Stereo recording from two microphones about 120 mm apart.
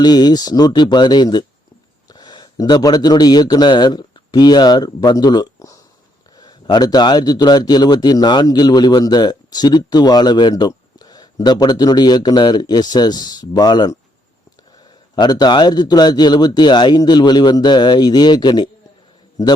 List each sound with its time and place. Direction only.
0.0 s a man's voice: 35° left (ahead or behind)
15.1 s a man's voice: 35° left (ahead or behind)